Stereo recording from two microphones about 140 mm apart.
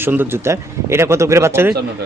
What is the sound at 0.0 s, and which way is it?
Speech, 15° right (ahead or behind).